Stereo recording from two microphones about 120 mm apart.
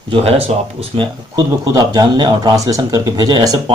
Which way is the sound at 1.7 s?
35° right (ahead or behind).